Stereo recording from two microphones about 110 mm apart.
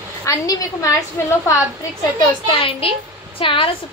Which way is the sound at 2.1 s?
50° left (ahead or behind).